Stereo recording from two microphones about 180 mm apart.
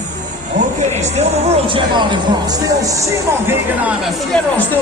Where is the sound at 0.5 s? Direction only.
40° right (ahead or behind).